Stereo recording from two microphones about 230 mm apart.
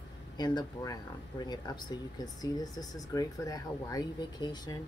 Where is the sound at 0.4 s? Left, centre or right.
Centre.